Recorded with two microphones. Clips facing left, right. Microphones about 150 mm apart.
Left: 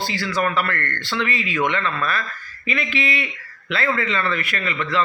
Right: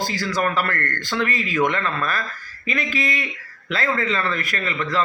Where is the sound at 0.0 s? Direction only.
40° right (ahead or behind).